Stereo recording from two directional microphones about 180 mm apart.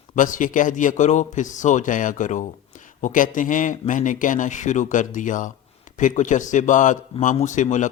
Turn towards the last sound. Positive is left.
turn(degrees=45)  # may be behind; listen again after turning